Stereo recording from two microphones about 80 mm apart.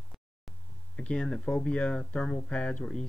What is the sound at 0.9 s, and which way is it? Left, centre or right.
Speech, centre.